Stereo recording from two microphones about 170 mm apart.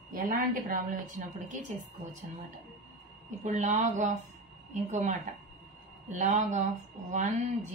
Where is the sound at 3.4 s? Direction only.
40° right (ahead or behind).